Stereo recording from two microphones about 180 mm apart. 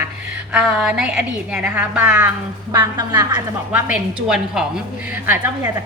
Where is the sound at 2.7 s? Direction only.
20° right (ahead or behind).